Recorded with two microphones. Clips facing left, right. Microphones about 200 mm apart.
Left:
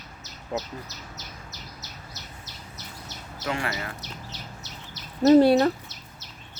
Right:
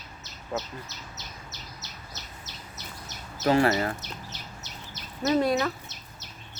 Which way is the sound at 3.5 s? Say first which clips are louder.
Right 8 dB; 40° right (ahead or behind).